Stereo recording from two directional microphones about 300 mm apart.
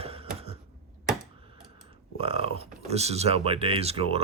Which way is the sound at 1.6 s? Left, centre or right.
Centre.